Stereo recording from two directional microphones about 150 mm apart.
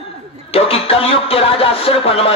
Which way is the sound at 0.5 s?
40° left (ahead or behind).